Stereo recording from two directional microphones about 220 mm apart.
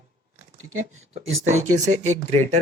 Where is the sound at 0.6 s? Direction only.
65° right (ahead or behind).